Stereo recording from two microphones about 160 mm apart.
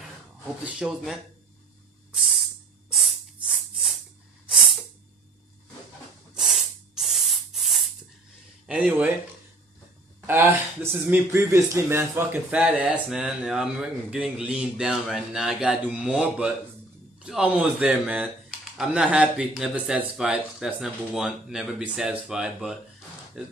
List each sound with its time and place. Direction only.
0.7 s speech: 5° right (ahead or behind)
2.1 s hiss: centre (ahead or behind)
2.9 s spray: centre (ahead or behind)
6.3 s spray: centre (ahead or behind)
8.6 s speech: 10° right (ahead or behind)
10.2 s speech: 15° right (ahead or behind)